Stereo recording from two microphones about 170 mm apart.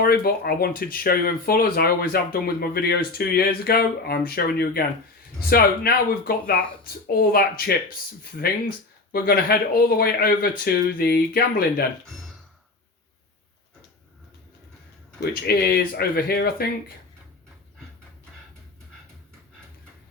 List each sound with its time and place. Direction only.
0.0 s speech: 65° left (ahead or behind)
15.4 s speech: 65° left (ahead or behind)